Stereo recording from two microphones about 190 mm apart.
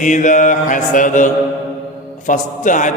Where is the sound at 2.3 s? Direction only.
40° left (ahead or behind).